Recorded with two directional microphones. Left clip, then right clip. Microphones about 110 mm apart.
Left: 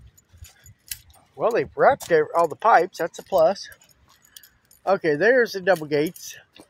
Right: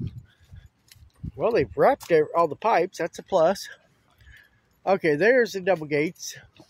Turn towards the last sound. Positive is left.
turn(degrees=-20)  # may be behind; listen again after turning